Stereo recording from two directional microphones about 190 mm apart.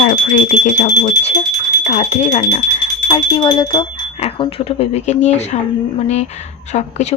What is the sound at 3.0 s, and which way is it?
Speech, 25° left (ahead or behind).